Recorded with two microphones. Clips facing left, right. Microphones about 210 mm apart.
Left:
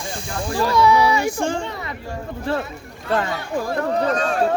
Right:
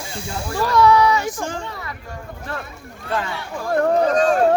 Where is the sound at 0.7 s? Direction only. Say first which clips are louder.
Right 2 dB; 10° left (ahead or behind).